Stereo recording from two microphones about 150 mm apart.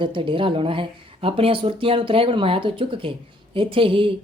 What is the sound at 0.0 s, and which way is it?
Speech, 35° right (ahead or behind).